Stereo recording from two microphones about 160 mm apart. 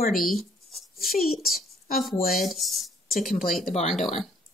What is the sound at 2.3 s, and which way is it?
Speech, centre (ahead or behind).